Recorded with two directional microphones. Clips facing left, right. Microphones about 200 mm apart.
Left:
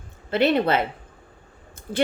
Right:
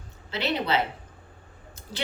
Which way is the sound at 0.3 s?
55° left (ahead or behind).